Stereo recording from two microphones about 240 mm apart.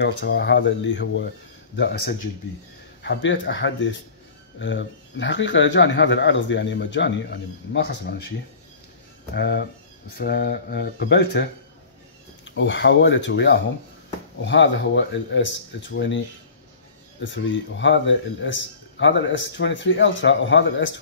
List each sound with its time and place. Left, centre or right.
0.0 s a man's voice: left
9.3 s speech: left
12.4 s a man's voice: left
17.2 s a man's voice: left